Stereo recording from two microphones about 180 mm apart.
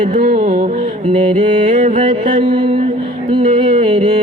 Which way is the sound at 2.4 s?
25° right (ahead or behind).